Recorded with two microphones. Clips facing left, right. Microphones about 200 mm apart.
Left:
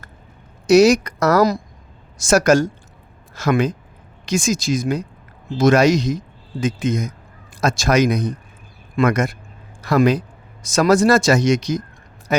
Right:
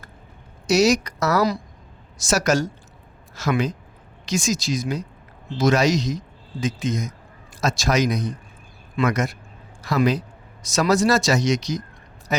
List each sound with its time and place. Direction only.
0.7 s speech: 55° left (ahead or behind)